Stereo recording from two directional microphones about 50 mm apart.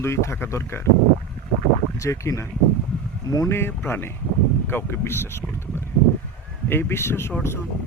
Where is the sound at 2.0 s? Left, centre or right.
Left.